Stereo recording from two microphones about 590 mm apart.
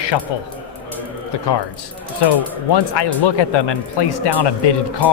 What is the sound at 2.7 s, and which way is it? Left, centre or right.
Speech, left.